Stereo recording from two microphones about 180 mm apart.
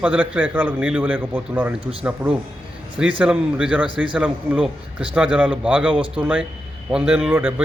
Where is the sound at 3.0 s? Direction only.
5° right (ahead or behind).